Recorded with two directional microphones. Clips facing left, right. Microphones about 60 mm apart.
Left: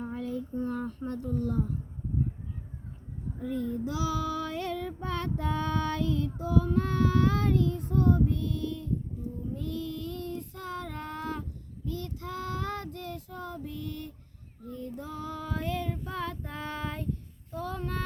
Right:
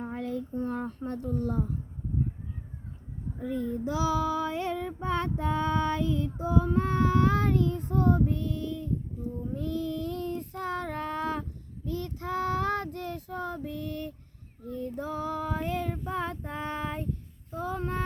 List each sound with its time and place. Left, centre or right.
0.0 s a sound: right
0.7 s a child's voice: right
3.4 s child singing: right
14.8 s female singing: right